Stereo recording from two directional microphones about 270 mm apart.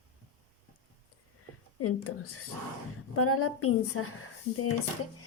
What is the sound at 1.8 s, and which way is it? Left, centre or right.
Speech, left.